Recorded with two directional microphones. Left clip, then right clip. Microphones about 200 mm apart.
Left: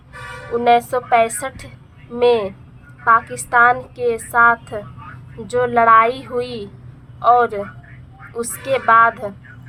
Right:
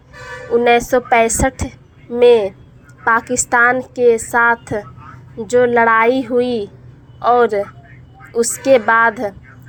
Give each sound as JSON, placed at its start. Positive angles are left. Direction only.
{"t": 0.5, "sound": "speech", "side_deg": -20}